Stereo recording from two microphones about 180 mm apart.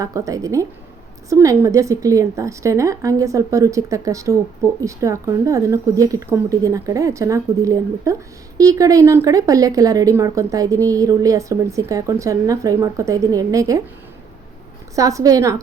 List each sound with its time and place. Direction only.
0.0 s speech: 20° right (ahead or behind)
14.9 s speech: 20° right (ahead or behind)